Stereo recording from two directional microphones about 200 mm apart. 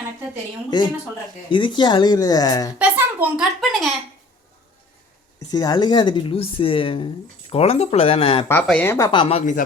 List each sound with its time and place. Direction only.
0.7 s speech: 20° left (ahead or behind)
2.7 s speech: 10° right (ahead or behind)
5.5 s speech: 20° left (ahead or behind)
8.6 s speech: 10° left (ahead or behind); by 9.4 s 25° left (ahead or behind)